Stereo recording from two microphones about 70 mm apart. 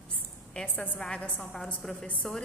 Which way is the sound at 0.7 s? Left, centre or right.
Left.